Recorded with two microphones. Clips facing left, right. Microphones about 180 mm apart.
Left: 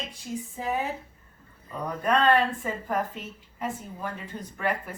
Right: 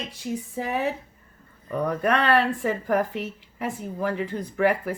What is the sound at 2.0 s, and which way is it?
A woman's voice, 80° right.